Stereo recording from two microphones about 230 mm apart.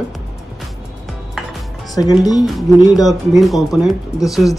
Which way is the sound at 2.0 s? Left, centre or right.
Centre.